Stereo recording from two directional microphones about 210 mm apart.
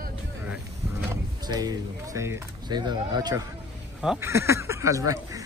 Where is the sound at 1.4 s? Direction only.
20° right (ahead or behind).